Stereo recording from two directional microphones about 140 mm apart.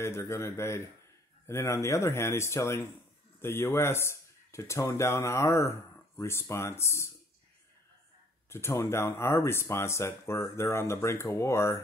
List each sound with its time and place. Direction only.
0.0 s speech: 20° left (ahead or behind)
8.5 s speech: 20° left (ahead or behind)